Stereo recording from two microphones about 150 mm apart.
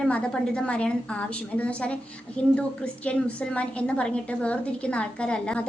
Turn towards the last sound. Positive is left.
turn(degrees=5)  # may be behind; listen again after turning